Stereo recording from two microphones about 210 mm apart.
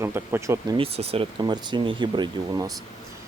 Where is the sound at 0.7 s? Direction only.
30° right (ahead or behind).